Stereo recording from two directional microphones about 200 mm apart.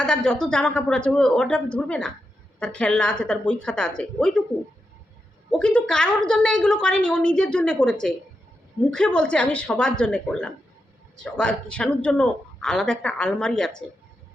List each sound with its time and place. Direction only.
0.0 s speech: 5° left (ahead or behind)
5.5 s speech: 5° left (ahead or behind)